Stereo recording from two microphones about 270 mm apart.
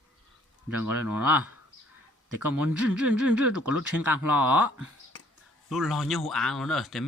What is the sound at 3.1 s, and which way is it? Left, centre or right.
Speech, right.